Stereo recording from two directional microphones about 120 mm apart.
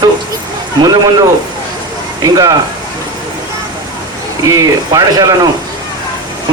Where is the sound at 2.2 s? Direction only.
30° right (ahead or behind).